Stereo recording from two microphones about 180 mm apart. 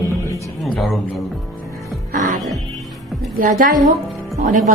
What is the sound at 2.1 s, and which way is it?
Music, 45° right (ahead or behind).